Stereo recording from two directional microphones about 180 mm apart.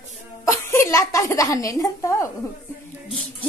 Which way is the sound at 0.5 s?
15° left (ahead or behind).